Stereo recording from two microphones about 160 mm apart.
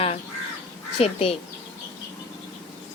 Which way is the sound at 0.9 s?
35° left (ahead or behind).